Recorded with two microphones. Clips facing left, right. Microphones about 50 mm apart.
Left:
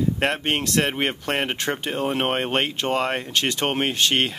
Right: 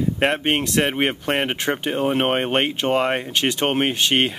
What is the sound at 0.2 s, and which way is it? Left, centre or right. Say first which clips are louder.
Speech: right 3 dB; centre.